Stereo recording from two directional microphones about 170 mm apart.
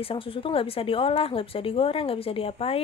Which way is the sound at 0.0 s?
30° left (ahead or behind).